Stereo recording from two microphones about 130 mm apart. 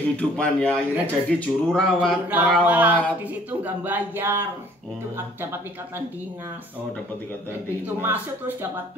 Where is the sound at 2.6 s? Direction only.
15° right (ahead or behind).